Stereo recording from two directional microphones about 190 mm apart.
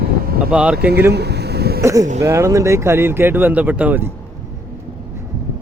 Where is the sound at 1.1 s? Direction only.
60° right (ahead or behind).